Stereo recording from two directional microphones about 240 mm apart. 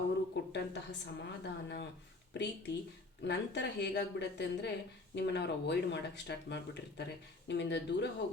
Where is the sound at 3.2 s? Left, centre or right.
Left.